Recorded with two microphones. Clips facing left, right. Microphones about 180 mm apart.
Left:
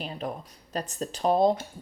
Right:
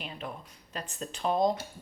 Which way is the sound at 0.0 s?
40° left (ahead or behind).